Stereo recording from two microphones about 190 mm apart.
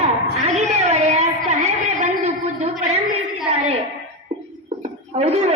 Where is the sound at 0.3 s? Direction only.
35° right (ahead or behind).